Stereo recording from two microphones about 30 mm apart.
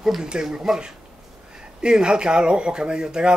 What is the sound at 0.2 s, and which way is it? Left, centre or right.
Speech, right.